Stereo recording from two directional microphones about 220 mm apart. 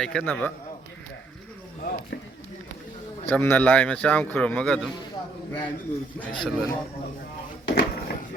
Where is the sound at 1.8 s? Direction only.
40° left (ahead or behind).